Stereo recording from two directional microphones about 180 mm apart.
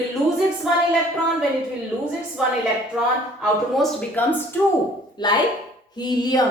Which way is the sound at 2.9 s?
5° right (ahead or behind).